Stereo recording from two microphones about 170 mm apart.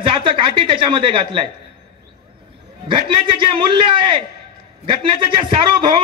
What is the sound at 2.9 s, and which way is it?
A man's voice, 30° right (ahead or behind).